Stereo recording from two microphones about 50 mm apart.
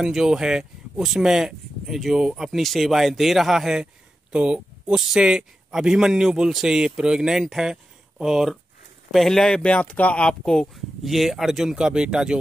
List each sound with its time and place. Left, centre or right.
0.0 s speech: centre
3.8 s a sound: centre
4.9 s speech: centre
9.1 s speech: centre
9.6 s speech: left
10.5 s speech: centre